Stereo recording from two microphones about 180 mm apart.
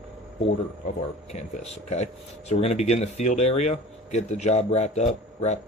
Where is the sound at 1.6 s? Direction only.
40° left (ahead or behind).